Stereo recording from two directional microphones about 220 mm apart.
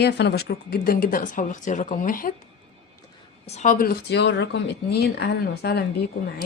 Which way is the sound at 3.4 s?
30° left (ahead or behind).